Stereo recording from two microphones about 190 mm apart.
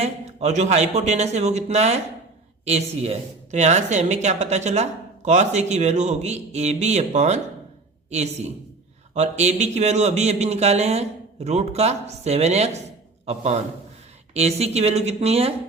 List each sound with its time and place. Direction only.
0.0 s a woman's voice: 35° right (ahead or behind)